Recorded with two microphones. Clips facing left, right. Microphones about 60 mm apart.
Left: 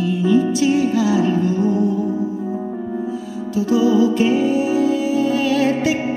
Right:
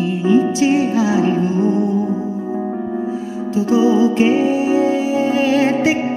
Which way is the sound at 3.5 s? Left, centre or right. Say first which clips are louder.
Right 1 dB; right.